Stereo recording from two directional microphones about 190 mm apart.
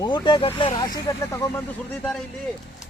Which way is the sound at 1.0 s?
15° left (ahead or behind).